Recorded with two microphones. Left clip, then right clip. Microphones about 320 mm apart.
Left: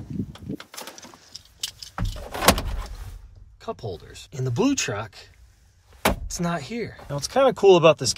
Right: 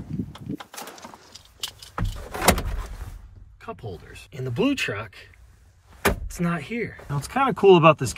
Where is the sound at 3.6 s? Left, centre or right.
Centre.